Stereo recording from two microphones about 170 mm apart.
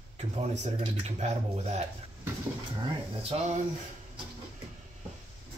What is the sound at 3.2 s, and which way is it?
Speech, 35° right (ahead or behind).